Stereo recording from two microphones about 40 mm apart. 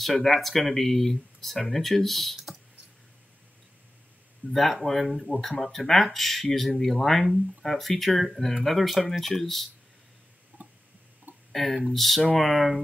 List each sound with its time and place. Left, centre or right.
0.0 s speech: centre
4.5 s speech: centre
10.6 s a sound: right
11.5 s speech: centre